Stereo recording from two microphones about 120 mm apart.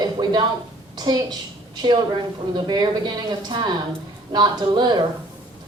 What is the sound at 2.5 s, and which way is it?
A woman's voice, 35° right (ahead or behind).